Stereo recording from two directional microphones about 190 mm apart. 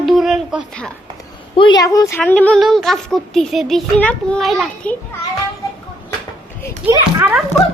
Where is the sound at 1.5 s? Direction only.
25° left (ahead or behind); by 4.9 s centre (ahead or behind).